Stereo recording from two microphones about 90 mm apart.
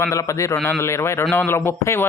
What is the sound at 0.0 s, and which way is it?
A man's voice, 35° left (ahead or behind).